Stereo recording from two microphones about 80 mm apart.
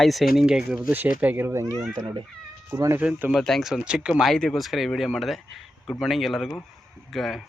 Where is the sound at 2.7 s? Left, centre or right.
Right.